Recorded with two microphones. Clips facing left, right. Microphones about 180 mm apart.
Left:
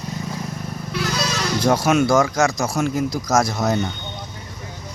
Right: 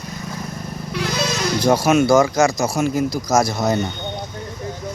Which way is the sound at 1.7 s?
5° right (ahead or behind).